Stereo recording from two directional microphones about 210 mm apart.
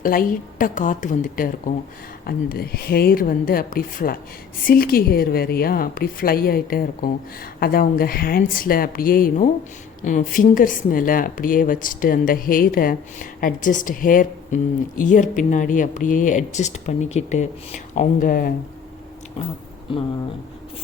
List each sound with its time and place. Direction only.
0.0 s a woman's voice: 40° left (ahead or behind)